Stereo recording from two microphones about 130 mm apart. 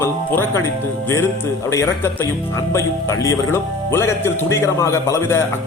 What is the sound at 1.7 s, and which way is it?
Speech, 25° left (ahead or behind).